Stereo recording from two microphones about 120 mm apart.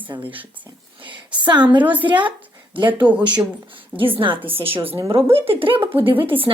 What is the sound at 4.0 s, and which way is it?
Speech, 45° right (ahead or behind).